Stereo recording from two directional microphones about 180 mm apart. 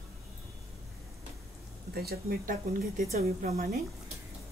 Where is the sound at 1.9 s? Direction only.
60° right (ahead or behind).